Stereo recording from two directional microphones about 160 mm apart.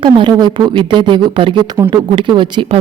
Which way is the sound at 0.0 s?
30° right (ahead or behind).